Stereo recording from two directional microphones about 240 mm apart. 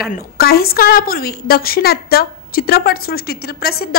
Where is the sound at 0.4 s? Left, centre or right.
Left.